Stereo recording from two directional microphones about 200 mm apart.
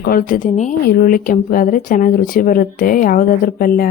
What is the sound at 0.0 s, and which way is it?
Speech, 45° left (ahead or behind).